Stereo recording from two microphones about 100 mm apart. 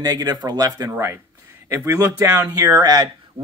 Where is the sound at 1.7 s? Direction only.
25° right (ahead or behind).